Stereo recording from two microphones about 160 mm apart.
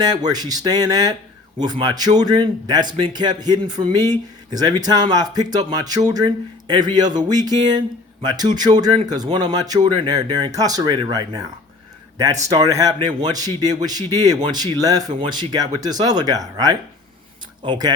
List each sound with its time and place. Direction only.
0.0 s speech: 25° right (ahead or behind)